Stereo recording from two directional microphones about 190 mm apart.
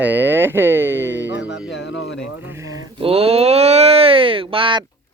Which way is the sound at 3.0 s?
30° right (ahead or behind).